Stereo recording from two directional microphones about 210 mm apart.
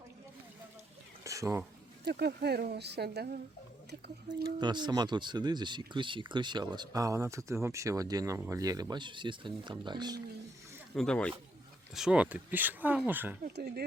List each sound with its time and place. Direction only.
1.2 s a sound: 15° right (ahead or behind)
2.0 s speech: 50° right (ahead or behind)
4.4 s speech: 20° right (ahead or behind)
10.9 s speech: 5° left (ahead or behind)
13.4 s speech: 45° right (ahead or behind)